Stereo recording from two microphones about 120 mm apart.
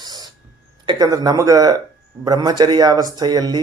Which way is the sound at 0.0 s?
35° right (ahead or behind).